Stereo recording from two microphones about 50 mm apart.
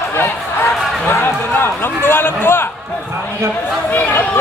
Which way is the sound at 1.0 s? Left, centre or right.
Left.